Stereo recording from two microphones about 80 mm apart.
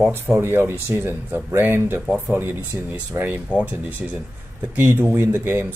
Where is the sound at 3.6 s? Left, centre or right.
Centre.